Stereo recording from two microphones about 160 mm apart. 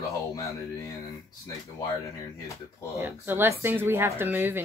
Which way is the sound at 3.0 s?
15° right (ahead or behind).